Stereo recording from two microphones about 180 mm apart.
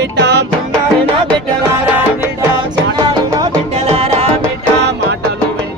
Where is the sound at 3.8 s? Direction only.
35° right (ahead or behind).